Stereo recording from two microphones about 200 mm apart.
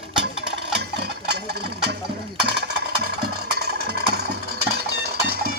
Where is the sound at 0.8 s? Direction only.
55° right (ahead or behind).